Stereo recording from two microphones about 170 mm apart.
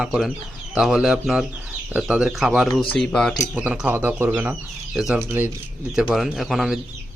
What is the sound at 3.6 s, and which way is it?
Speech, 10° right (ahead or behind).